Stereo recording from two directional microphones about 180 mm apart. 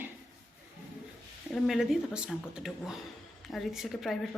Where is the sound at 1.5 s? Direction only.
Centre (ahead or behind).